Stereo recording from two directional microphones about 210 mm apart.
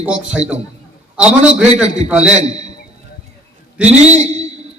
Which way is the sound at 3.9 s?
30° right (ahead or behind).